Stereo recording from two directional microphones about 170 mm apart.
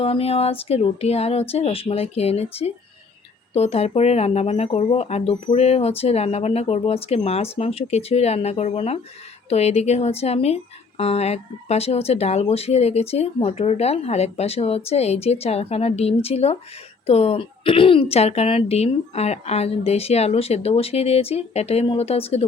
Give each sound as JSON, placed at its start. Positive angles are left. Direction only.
{"t": 0.0, "sound": "speech", "side_deg": 35}